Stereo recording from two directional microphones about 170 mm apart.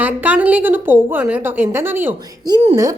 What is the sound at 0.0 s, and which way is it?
A woman's voice, 10° right (ahead or behind).